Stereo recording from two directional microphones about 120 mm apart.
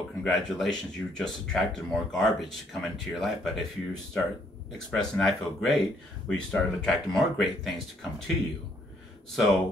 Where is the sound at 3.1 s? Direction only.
Centre (ahead or behind).